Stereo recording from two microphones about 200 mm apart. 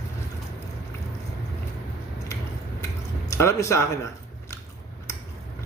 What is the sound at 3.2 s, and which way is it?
Speech, 15° left (ahead or behind).